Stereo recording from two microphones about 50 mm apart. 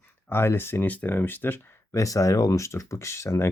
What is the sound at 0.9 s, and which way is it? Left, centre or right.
Speech, left.